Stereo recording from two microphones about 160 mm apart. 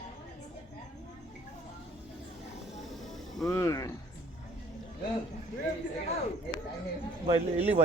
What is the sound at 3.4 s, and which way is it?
Speech, 15° left (ahead or behind).